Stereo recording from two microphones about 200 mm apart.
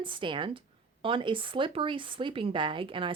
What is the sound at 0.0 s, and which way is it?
Speech, 25° right (ahead or behind).